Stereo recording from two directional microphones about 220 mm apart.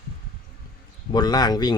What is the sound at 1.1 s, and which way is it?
Speech, 20° left (ahead or behind).